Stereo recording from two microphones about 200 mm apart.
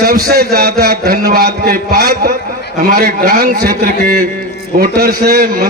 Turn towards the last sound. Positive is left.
turn(degrees=-50)  # may be behind; listen again after turning